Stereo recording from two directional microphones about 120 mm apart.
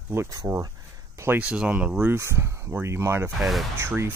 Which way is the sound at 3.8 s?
20° right (ahead or behind).